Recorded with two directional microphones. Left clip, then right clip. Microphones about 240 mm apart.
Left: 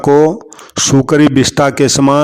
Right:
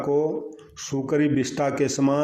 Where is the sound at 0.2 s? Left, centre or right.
Left.